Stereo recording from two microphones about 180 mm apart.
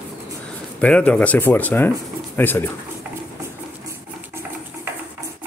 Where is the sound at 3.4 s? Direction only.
15° right (ahead or behind).